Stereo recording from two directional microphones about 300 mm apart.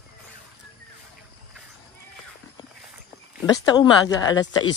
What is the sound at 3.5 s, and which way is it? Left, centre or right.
Speech, centre.